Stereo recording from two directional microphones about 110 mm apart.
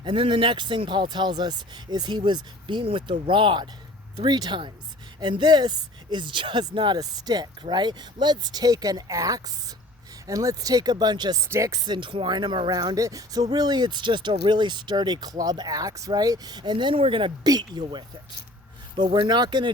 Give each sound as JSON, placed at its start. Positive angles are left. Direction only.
{"t": 0.0, "sound": "speech", "side_deg": -50}
{"t": 11.4, "sound": "speech", "side_deg": -25}
{"t": 17.4, "sound": "speech", "side_deg": -40}